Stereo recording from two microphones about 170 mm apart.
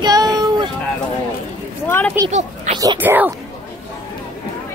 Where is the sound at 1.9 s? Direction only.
10° left (ahead or behind).